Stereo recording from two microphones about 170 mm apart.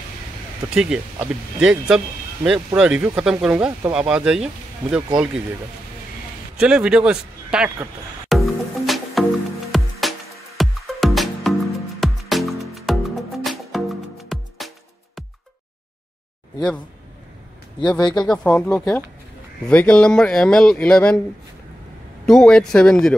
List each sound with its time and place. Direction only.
0.7 s speech: 5° right (ahead or behind)
6.6 s music: 5° right (ahead or behind)
17.7 s speech: 25° left (ahead or behind)
18.2 s speech: 5° left (ahead or behind)
22.2 s speech: 5° left (ahead or behind)